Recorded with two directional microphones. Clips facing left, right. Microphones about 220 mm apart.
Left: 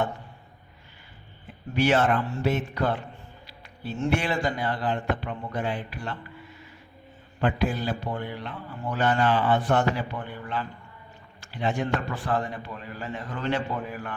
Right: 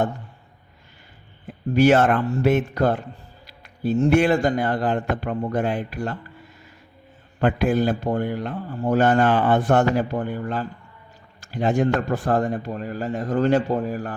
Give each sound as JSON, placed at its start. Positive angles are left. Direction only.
{"t": 1.7, "sound": "a man's voice", "side_deg": -45}
{"t": 7.4, "sound": "a man's voice", "side_deg": -50}